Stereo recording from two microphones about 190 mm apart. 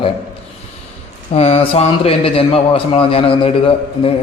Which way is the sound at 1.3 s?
30° left (ahead or behind).